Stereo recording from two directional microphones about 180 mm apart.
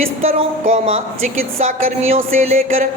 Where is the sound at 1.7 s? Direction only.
45° right (ahead or behind).